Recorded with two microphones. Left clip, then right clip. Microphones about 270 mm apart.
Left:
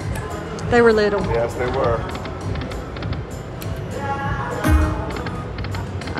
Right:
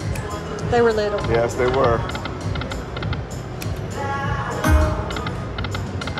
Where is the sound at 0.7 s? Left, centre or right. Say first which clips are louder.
Left 3 dB; left.